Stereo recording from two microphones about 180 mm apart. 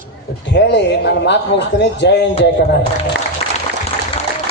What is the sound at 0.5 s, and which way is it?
A man's voice, 75° left (ahead or behind).